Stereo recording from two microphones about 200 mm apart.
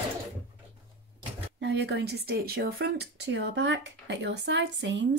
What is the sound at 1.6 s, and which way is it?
Speech, 60° right (ahead or behind).